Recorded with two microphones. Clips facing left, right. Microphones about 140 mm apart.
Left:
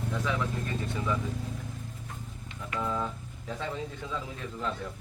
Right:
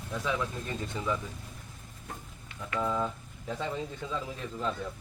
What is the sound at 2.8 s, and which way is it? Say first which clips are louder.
Speech: right 2 dB; 5° right (ahead or behind).